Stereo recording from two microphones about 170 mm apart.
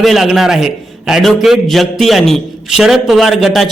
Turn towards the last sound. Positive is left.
turn(degrees=0)  # may be behind; listen again after turning